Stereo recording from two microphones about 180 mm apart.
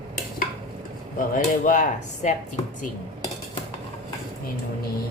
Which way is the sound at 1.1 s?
50° left (ahead or behind).